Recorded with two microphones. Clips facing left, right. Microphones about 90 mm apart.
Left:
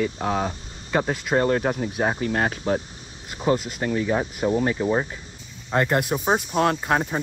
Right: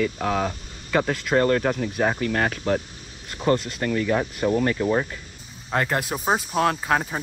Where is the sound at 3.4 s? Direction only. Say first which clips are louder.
Even; 5° left (ahead or behind).